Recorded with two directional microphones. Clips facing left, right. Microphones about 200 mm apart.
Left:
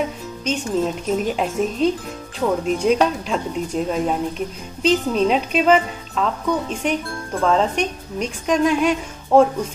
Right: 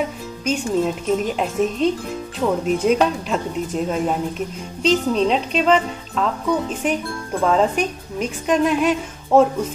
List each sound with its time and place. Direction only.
0.4 s speech: 5° right (ahead or behind)